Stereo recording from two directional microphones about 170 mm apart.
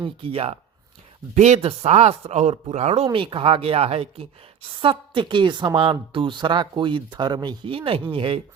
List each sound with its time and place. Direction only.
0.0 s a woman's voice: 35° right (ahead or behind)